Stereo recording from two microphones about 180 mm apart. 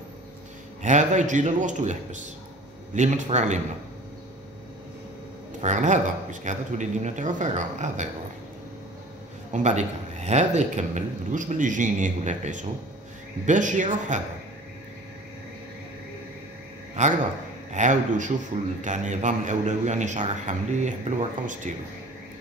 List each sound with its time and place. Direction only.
0.8 s a man's voice: 40° right (ahead or behind)
5.6 s speech: 40° right (ahead or behind)
9.5 s a man's voice: 40° right (ahead or behind)
17.0 s a man's voice: 40° right (ahead or behind)